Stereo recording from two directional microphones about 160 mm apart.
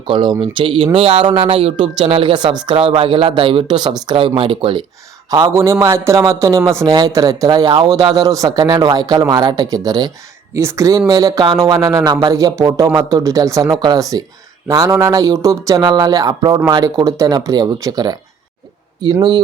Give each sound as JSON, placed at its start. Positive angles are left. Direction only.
{"t": 0.1, "sound": "speech", "side_deg": -30}
{"t": 5.3, "sound": "speech", "side_deg": -20}